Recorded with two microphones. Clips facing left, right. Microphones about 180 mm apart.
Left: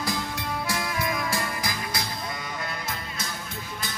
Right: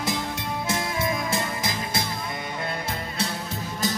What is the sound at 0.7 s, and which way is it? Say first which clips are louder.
Music: right 4 dB; 25° right (ahead or behind).